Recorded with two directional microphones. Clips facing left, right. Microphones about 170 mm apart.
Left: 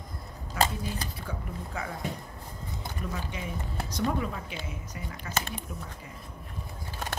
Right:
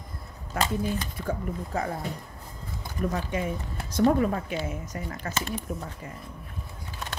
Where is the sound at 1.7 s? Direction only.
40° right (ahead or behind).